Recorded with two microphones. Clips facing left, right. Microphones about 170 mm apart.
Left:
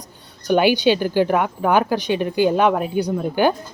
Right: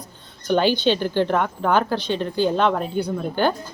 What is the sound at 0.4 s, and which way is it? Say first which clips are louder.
A woman's voice: left 3 dB; 10° left (ahead or behind).